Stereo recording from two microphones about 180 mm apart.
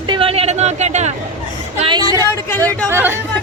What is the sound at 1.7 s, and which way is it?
A woman's voice, 25° right (ahead or behind).